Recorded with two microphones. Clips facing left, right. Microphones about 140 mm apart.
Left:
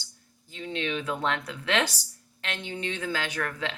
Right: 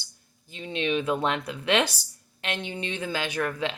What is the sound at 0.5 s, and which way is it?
Speech, 15° right (ahead or behind).